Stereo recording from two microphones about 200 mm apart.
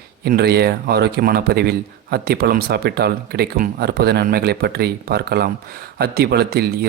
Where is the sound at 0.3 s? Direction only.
55° right (ahead or behind).